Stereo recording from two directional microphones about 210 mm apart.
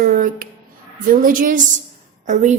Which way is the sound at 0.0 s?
40° right (ahead or behind).